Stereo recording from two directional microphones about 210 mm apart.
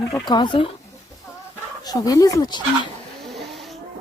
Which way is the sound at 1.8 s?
15° left (ahead or behind).